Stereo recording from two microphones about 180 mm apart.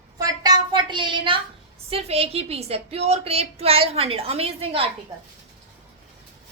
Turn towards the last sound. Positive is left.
turn(degrees=-30)  # may be behind; listen again after turning